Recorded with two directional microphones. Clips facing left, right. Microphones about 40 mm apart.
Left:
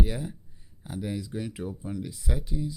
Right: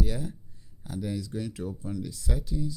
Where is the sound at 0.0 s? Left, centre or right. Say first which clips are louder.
Left 1 dB; left.